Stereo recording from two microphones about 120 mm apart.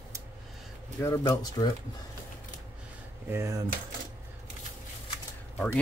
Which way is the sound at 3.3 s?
25° right (ahead or behind).